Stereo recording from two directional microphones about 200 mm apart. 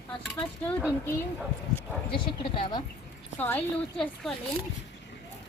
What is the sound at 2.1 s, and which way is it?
Speech, 25° left (ahead or behind).